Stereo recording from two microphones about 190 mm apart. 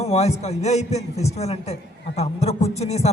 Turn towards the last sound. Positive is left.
turn(degrees=35)  # may be behind; listen again after turning